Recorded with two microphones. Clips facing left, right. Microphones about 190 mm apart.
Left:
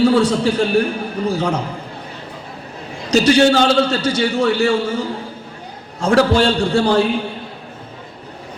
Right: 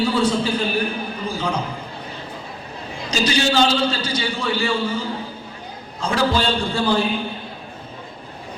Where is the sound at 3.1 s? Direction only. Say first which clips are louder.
Left 8 dB; 65° left (ahead or behind).